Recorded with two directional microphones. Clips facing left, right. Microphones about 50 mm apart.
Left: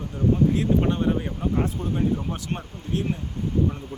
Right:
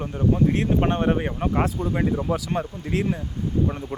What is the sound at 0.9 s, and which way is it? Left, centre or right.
Speech, right.